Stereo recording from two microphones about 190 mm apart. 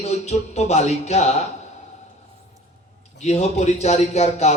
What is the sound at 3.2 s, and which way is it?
Speech, 35° left (ahead or behind).